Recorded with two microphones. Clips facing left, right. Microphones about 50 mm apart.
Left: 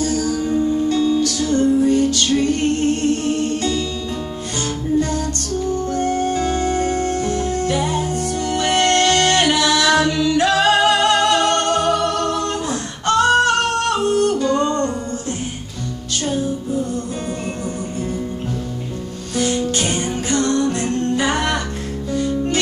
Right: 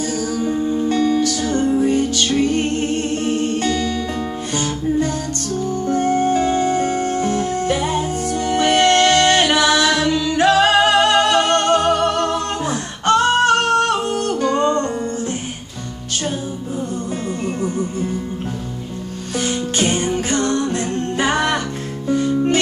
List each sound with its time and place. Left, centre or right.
0.0 s music: right
19.3 s music: right